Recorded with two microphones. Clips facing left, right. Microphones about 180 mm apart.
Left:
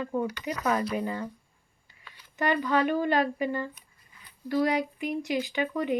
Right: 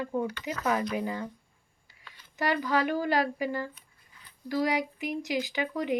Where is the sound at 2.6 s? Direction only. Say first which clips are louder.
Left 2 dB; 10° right (ahead or behind).